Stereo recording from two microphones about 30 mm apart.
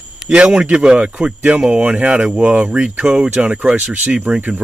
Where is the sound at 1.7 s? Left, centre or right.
Right.